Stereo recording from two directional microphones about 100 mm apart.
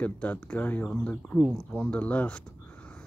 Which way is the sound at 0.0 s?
15° left (ahead or behind).